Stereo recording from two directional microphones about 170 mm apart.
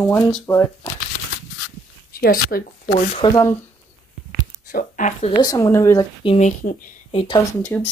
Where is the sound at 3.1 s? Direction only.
25° left (ahead or behind).